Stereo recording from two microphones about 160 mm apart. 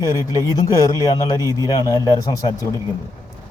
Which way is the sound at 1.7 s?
25° left (ahead or behind).